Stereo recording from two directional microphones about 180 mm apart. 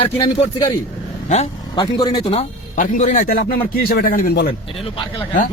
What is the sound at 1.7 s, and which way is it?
Speech, 20° left (ahead or behind).